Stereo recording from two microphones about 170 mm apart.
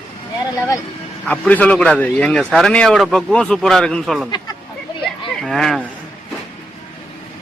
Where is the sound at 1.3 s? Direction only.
10° left (ahead or behind).